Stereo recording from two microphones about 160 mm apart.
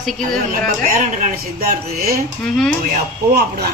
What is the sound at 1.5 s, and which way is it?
Speech, 70° right (ahead or behind).